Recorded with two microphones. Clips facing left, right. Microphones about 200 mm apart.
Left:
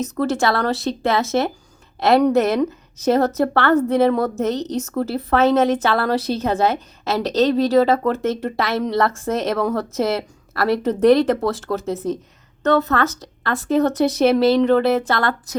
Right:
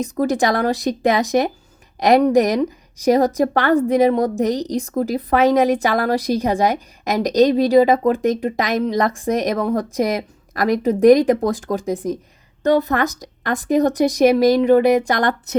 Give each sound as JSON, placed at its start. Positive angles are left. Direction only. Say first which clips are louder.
{"t": 0.0, "sound": "a woman's voice", "louder": "right 2 dB", "side_deg": -15}